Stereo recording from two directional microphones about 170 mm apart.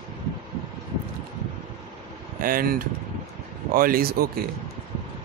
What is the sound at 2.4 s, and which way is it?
Speech, 55° right (ahead or behind).